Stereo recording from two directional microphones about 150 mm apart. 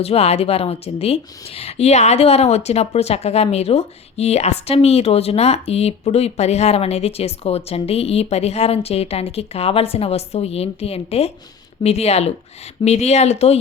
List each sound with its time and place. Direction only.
0.0 s a woman's voice: 45° left (ahead or behind)